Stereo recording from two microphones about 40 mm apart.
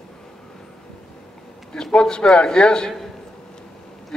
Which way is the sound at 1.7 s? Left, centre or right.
Left.